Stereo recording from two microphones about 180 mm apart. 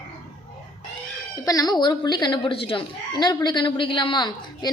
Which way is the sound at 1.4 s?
20° left (ahead or behind).